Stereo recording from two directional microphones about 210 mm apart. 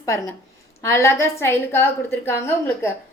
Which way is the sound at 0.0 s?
15° left (ahead or behind).